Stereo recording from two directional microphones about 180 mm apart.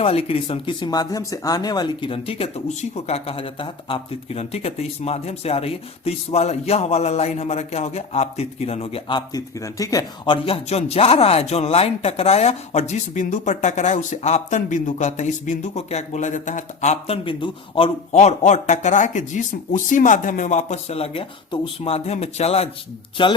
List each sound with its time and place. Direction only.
0.0 s speech: 30° left (ahead or behind)